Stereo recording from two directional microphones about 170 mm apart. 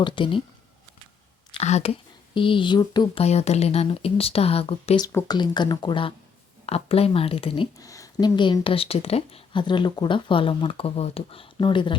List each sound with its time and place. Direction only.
0.0 s speech: 30° left (ahead or behind)
1.5 s speech: 40° left (ahead or behind)
3.2 s speech: 40° left (ahead or behind)
5.0 s speech: 20° left (ahead or behind)